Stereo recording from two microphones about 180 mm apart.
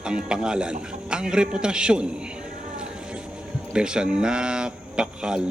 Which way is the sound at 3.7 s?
5° right (ahead or behind).